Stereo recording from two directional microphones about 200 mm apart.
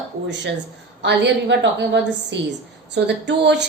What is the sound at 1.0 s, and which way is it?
A woman's voice, 60° right (ahead or behind).